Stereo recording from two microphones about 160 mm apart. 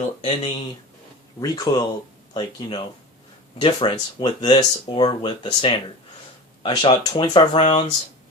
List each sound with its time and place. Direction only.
0.2 s speech: 35° left (ahead or behind)
1.4 s speech: 25° left (ahead or behind)